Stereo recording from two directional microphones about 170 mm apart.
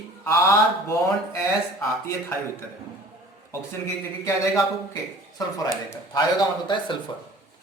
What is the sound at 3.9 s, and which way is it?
A man's voice, 20° left (ahead or behind).